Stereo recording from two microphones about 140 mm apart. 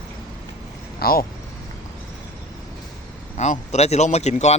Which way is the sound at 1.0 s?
90° left.